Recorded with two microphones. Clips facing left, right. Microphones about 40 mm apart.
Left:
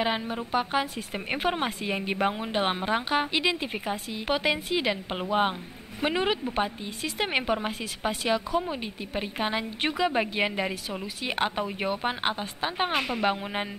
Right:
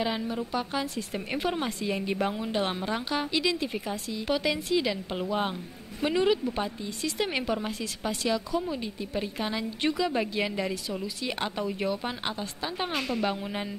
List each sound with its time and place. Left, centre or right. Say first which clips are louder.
0.0 s a woman's voice: left 1 dB; left